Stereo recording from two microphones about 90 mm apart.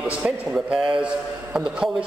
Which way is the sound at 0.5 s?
5° right (ahead or behind).